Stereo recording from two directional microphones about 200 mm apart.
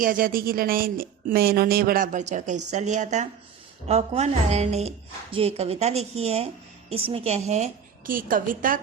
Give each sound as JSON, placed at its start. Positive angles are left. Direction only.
{"t": 0.0, "sound": "a woman's voice", "side_deg": -45}